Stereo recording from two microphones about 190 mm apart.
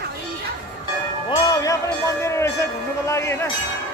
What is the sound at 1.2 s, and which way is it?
Speech, 20° left (ahead or behind).